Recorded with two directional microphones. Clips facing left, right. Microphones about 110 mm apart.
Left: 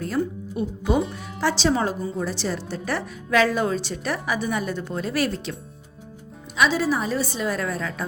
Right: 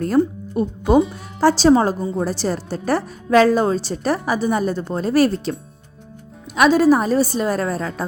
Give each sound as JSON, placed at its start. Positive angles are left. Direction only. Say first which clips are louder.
{"t": 0.6, "sound": "a woman's voice", "louder": "right 7 dB", "side_deg": -45}
{"t": 6.6, "sound": "a woman's voice", "louder": "right 8 dB", "side_deg": -45}